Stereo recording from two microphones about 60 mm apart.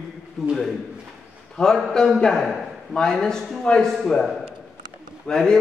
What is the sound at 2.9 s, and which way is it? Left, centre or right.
A man's voice, centre.